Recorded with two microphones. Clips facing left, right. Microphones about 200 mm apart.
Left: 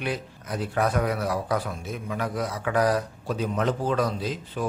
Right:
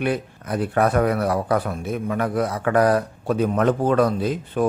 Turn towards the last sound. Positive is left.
turn(degrees=-55)  # may be behind; listen again after turning